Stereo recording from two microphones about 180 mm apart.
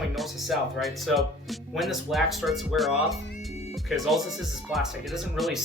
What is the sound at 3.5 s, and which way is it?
Music, 35° left (ahead or behind).